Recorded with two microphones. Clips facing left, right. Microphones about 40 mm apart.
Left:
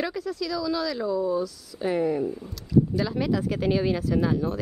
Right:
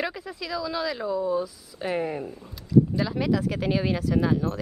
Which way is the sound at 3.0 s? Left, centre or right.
Centre.